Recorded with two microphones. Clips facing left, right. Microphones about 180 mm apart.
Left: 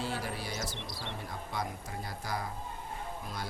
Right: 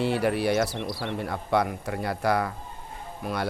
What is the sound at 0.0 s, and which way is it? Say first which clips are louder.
Speech: right 13 dB; 70° right (ahead or behind).